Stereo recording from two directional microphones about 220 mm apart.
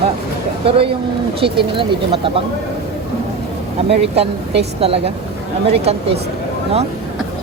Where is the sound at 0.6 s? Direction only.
25° right (ahead or behind).